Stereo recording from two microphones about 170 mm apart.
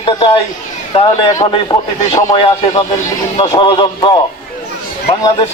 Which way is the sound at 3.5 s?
30° left (ahead or behind).